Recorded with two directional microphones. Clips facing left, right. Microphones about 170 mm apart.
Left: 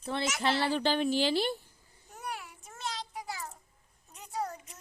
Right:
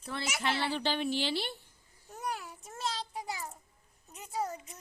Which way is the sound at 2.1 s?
40° right (ahead or behind).